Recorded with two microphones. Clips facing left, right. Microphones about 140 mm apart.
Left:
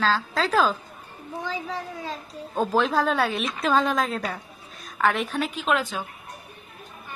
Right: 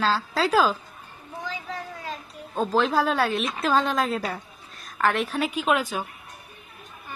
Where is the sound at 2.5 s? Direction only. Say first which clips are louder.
Even; centre (ahead or behind).